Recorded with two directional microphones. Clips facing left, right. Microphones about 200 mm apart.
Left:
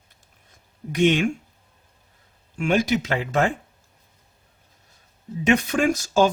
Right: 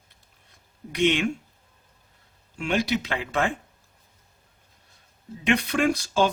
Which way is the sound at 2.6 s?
45° left (ahead or behind).